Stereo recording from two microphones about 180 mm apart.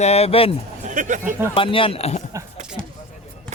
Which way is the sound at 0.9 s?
45° right (ahead or behind).